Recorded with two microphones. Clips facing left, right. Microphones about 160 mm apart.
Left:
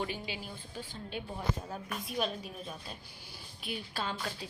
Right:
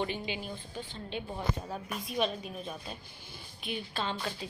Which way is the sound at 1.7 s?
Centre (ahead or behind).